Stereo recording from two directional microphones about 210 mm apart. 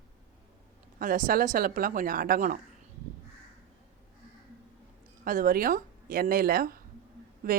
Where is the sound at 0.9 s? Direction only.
40° right (ahead or behind).